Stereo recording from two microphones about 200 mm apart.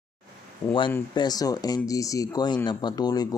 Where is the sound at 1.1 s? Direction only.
20° left (ahead or behind).